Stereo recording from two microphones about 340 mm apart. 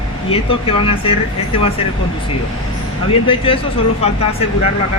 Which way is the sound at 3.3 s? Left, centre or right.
Centre.